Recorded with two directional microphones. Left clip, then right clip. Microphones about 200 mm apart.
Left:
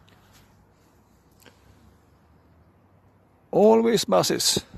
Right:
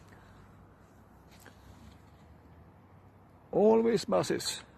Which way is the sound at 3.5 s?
55° left (ahead or behind).